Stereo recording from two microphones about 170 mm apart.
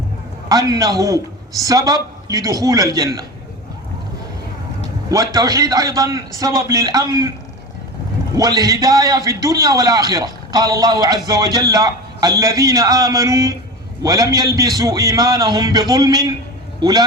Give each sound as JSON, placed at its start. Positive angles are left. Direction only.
{"t": 0.4, "sound": "a man's voice", "side_deg": -20}
{"t": 5.0, "sound": "a man's voice", "side_deg": -20}
{"t": 8.4, "sound": "a man's voice", "side_deg": -20}